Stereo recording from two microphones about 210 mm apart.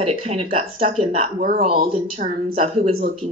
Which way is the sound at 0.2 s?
30° right (ahead or behind).